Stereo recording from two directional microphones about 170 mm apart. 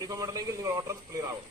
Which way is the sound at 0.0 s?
20° right (ahead or behind).